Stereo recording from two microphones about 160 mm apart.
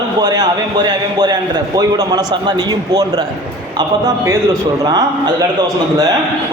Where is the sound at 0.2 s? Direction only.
25° right (ahead or behind).